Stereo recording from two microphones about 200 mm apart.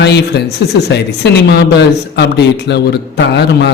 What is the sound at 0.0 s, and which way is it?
Speech, 55° left (ahead or behind).